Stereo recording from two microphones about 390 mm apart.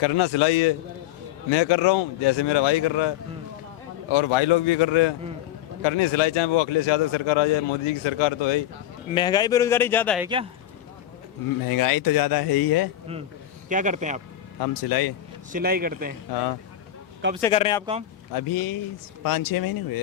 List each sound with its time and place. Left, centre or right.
0.0 s a man's voice: left
4.1 s a man's voice: left
9.1 s speech: centre
10.2 s speech: centre
11.6 s speech: left
13.7 s a man's voice: centre
14.6 s speech: left
15.5 s a man's voice: right
17.4 s speech: centre
18.3 s speech: left